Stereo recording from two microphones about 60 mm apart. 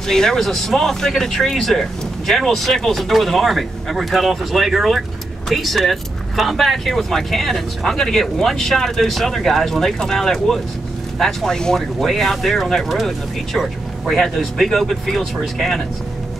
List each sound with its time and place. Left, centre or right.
0.0 s speech: centre